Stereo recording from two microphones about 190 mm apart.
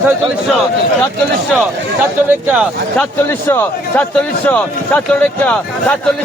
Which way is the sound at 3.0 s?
10° left (ahead or behind).